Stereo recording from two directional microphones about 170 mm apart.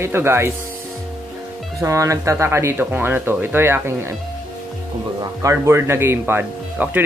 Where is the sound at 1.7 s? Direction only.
20° right (ahead or behind).